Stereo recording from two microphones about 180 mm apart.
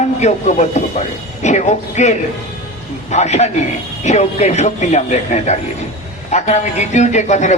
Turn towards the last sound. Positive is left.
turn(degrees=40)  # may be behind; listen again after turning